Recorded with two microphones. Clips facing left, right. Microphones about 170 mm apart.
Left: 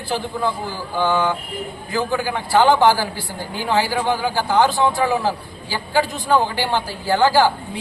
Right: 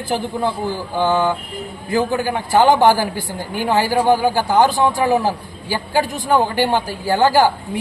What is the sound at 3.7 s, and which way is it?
Speech, 45° right (ahead or behind).